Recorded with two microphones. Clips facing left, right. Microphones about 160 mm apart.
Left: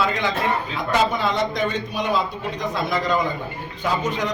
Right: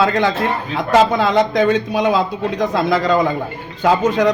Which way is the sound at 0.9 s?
90° right.